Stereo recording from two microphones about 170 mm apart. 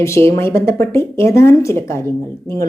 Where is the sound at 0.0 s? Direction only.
15° left (ahead or behind).